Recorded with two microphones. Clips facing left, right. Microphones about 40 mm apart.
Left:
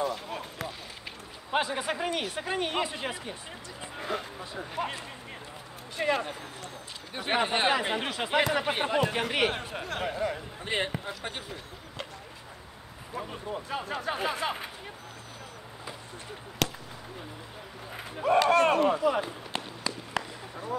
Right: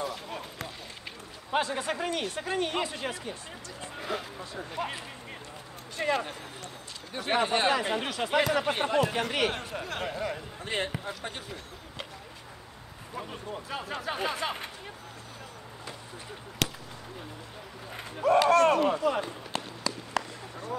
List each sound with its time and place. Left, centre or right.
0.0 s a sound: centre
1.5 s speech: centre
3.9 s speech: centre
5.9 s speech: centre
7.2 s speech: left
9.8 s speech: centre
10.6 s speech: left
13.1 s speech: centre
16.6 s fireworks: centre
18.5 s speech: left
18.8 s speech: centre
19.5 s run: left